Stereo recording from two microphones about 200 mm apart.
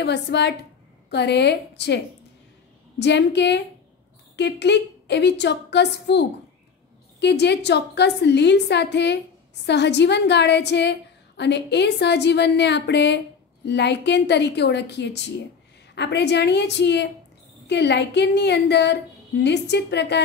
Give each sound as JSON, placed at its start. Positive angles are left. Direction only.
{"t": 0.0, "sound": "a woman's voice", "side_deg": 60}
{"t": 3.0, "sound": "a woman's voice", "side_deg": 60}